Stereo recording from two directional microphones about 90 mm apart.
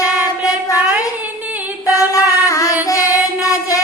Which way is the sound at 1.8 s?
40° left (ahead or behind).